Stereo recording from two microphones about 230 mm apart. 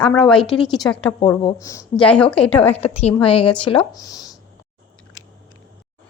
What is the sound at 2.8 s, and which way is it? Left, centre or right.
Speech, left.